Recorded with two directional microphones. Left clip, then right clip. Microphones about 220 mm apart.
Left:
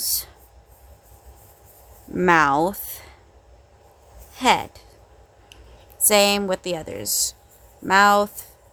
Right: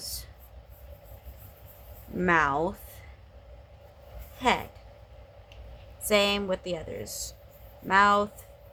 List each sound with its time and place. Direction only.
2.1 s speech: 55° left (ahead or behind)
4.4 s speech: 55° left (ahead or behind)
6.1 s a woman's voice: 55° left (ahead or behind)